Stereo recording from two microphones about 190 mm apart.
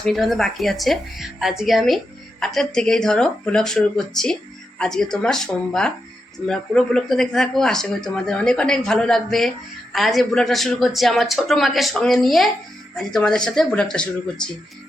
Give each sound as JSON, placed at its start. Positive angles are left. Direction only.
{"t": 0.0, "sound": "speech", "side_deg": 0}